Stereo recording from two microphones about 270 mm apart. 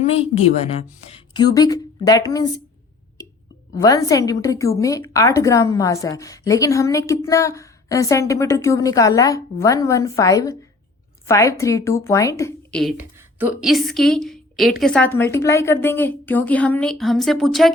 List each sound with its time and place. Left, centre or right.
0.0 s a woman's voice: left
3.8 s a woman's voice: centre
13.0 s a woman's voice: centre